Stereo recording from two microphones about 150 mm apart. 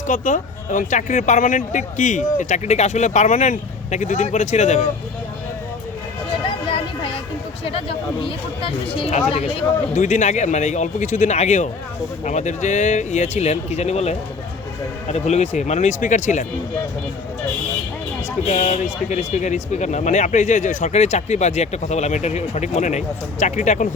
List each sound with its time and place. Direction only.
0.1 s speech: 55° left (ahead or behind)
6.7 s a sound: 35° left (ahead or behind)
7.6 s speech: 40° left (ahead or behind)
9.9 s speech: 55° left (ahead or behind)
18.4 s speech: 55° left (ahead or behind)